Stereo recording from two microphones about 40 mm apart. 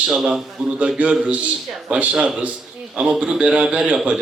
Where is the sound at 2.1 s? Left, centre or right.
Right.